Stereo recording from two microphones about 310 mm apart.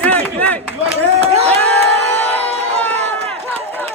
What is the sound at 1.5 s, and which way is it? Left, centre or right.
Crowd, centre.